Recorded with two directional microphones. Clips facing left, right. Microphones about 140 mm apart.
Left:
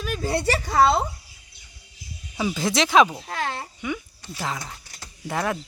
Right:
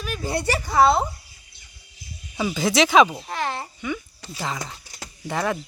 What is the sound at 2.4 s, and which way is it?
Speech, centre (ahead or behind).